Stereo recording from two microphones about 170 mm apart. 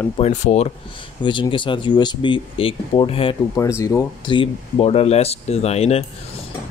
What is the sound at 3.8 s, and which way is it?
Speech, 20° left (ahead or behind).